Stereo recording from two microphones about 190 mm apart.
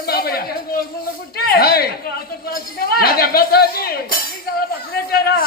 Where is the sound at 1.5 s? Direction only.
55° left (ahead or behind).